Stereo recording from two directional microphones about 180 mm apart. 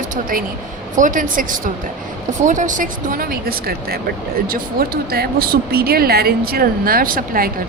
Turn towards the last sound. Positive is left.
turn(degrees=-50)  # may be behind; listen again after turning